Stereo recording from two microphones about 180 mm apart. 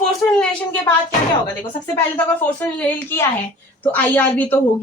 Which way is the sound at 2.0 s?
10° left (ahead or behind).